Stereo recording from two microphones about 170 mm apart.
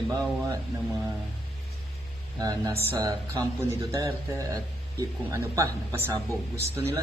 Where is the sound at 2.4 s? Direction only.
20° right (ahead or behind).